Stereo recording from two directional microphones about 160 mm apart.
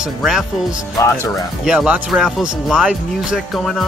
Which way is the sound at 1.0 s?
20° left (ahead or behind).